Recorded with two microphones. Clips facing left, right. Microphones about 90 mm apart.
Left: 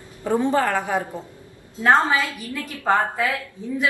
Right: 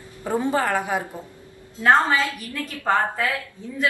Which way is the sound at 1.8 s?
15° left (ahead or behind).